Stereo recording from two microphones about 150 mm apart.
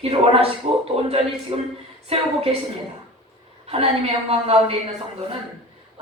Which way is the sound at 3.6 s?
40° right (ahead or behind).